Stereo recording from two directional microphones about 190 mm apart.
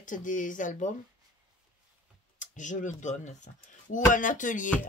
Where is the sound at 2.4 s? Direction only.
40° left (ahead or behind).